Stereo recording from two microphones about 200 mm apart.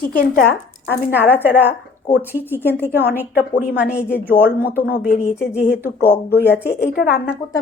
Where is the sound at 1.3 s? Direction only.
10° right (ahead or behind).